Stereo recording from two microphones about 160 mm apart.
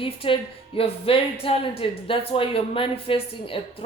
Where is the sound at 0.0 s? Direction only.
35° left (ahead or behind).